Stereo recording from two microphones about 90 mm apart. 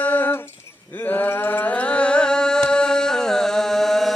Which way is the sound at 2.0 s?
10° left (ahead or behind).